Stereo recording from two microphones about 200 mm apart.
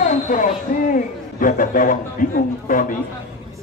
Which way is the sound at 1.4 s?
40° left (ahead or behind).